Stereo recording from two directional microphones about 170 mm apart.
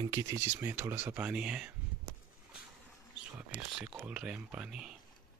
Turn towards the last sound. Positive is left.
turn(degrees=-5)  # may be behind; listen again after turning